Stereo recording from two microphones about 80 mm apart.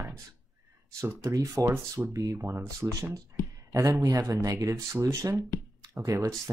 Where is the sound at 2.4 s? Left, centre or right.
Right.